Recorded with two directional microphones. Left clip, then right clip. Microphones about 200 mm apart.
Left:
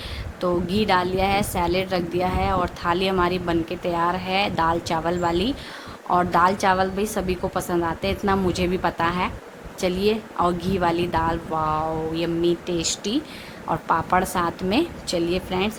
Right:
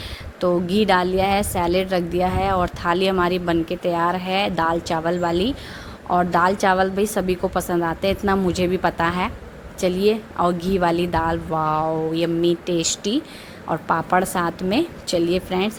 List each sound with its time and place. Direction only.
0.3 s a woman's voice: 20° right (ahead or behind)